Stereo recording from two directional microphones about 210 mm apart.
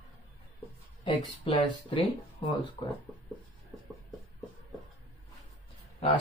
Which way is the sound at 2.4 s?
20° left (ahead or behind).